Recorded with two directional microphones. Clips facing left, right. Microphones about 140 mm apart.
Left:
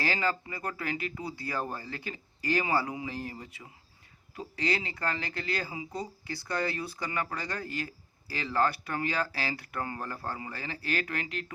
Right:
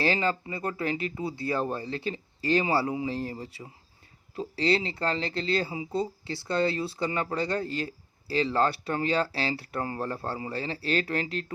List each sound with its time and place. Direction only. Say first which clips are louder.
0.0 s speech: right 4 dB; 25° right (ahead or behind)